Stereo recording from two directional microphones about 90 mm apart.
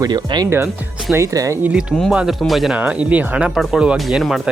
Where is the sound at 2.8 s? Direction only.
15° right (ahead or behind).